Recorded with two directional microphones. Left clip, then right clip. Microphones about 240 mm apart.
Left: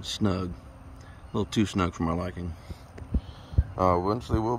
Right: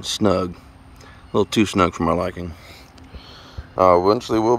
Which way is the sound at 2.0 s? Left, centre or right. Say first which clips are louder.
Right 10 dB; right.